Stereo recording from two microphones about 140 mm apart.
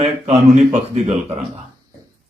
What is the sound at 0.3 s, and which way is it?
Speech, 55° right (ahead or behind).